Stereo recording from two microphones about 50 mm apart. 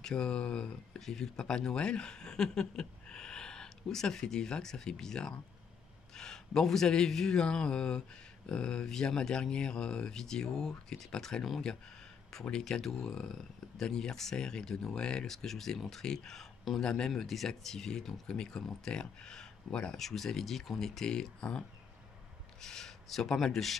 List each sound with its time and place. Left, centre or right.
0.0 s speech: centre